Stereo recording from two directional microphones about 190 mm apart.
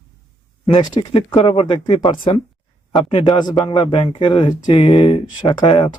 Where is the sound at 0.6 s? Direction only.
25° left (ahead or behind).